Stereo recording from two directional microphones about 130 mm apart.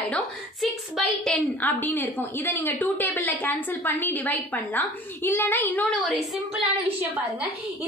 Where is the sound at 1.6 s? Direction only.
15° left (ahead or behind).